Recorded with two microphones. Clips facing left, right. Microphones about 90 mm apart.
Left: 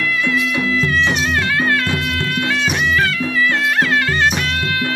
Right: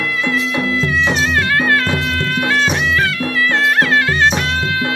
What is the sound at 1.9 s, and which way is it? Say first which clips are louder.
Music: right 2 dB; 30° right (ahead or behind).